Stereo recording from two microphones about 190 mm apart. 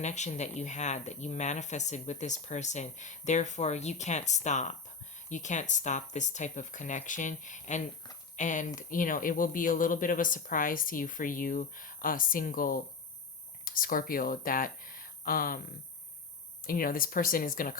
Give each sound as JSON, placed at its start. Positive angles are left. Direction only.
{"t": 0.0, "sound": "speech", "side_deg": 40}
{"t": 16.6, "sound": "speech", "side_deg": 50}